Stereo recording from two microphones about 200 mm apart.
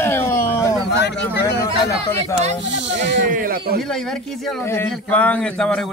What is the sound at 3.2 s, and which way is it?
Speech, 45° right (ahead or behind).